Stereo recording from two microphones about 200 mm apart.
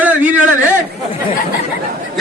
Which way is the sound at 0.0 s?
5° right (ahead or behind).